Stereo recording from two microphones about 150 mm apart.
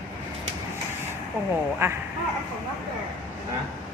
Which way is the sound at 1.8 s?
15° right (ahead or behind).